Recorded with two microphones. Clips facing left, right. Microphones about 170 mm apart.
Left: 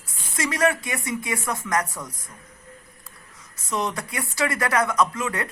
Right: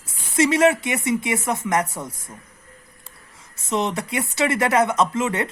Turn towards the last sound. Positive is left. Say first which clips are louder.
# right 4 dB
turn(degrees=-25)  # may be behind; listen again after turning